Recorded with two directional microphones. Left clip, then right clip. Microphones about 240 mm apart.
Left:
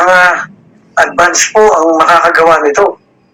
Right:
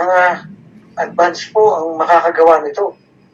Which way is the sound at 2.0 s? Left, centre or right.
Left.